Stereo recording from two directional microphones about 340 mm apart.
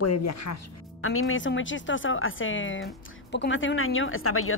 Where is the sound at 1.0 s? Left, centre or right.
Left.